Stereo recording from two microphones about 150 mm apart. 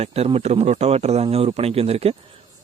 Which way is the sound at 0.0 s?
40° right (ahead or behind).